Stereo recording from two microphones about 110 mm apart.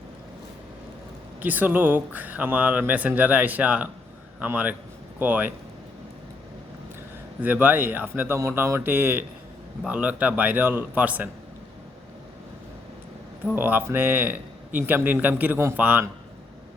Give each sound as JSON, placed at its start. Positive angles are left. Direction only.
{"t": 1.4, "sound": "a man's voice", "side_deg": -15}
{"t": 7.4, "sound": "speech", "side_deg": -15}
{"t": 13.6, "sound": "speech", "side_deg": -20}